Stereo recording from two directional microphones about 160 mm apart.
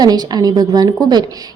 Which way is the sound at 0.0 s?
25° right (ahead or behind).